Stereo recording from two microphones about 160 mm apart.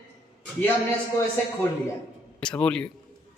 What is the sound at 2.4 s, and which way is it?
Speech, 5° left (ahead or behind).